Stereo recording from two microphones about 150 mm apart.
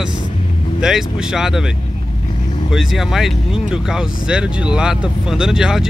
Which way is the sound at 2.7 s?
Centre (ahead or behind).